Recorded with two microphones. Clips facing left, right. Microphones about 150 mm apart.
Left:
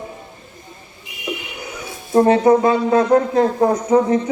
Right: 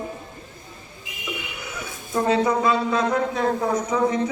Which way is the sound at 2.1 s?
50° left (ahead or behind).